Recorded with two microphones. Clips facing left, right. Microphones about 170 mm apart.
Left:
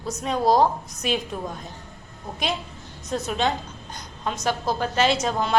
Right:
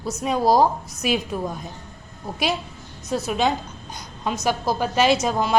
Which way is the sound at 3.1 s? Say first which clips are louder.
Right 3 dB; 5° right (ahead or behind).